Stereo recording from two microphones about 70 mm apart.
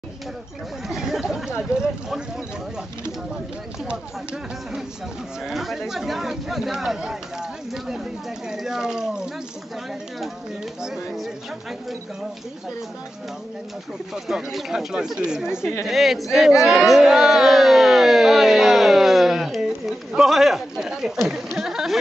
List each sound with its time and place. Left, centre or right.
0.8 s chatter: centre
3.8 s speech: centre
14.1 s speech: centre
21.5 s a sound: centre